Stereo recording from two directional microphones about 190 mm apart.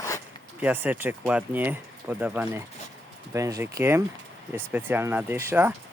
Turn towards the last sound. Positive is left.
turn(degrees=-10)  # may be behind; listen again after turning